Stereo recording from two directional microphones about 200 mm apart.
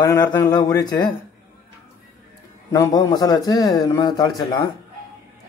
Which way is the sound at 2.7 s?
15° left (ahead or behind).